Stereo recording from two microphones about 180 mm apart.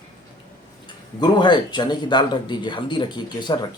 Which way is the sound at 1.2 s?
25° left (ahead or behind).